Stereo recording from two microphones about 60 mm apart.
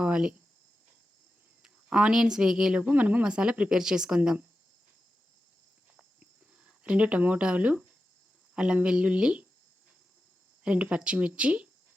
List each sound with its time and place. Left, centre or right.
0.0 s speech: centre
1.6 s speech: centre
2.7 s speech: right
3.2 s speech: centre
6.7 s speech: centre
10.6 s speech: centre